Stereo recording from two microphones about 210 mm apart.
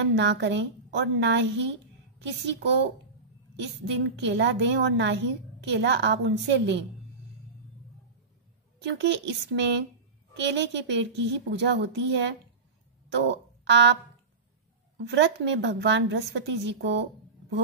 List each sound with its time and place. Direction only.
0.0 s a woman's voice: 55° right (ahead or behind)
8.8 s a woman's voice: 55° right (ahead or behind)
15.0 s a woman's voice: 55° right (ahead or behind)